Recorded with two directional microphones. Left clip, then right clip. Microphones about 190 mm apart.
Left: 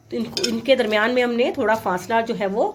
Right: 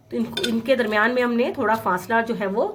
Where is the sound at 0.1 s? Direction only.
Centre (ahead or behind).